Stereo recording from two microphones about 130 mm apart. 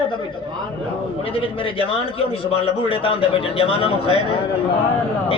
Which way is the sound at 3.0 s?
45° left (ahead or behind).